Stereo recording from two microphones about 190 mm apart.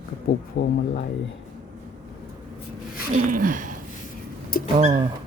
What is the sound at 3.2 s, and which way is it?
Speech, 45° right (ahead or behind).